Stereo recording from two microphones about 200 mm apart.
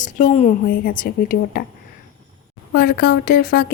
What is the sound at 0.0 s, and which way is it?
Speech, 40° left (ahead or behind).